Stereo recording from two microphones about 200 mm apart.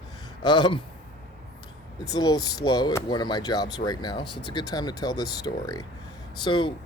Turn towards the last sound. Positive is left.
turn(degrees=25)  # may be behind; listen again after turning